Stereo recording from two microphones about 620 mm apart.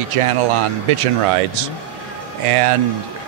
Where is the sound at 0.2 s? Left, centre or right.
Right.